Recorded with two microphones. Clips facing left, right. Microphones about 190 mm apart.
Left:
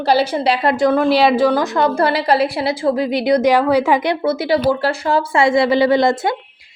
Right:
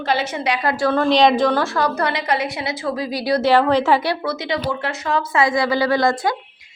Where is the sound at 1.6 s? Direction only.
25° left (ahead or behind).